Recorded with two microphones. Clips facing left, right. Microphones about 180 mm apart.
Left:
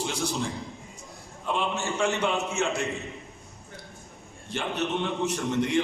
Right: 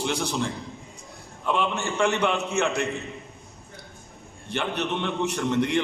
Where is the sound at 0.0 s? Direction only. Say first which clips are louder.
Right 2 dB; 65° right (ahead or behind).